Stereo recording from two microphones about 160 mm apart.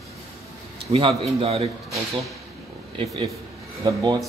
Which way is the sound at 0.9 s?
30° right (ahead or behind).